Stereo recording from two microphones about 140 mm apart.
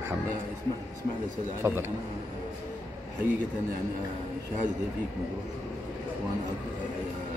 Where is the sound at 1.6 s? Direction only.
20° right (ahead or behind).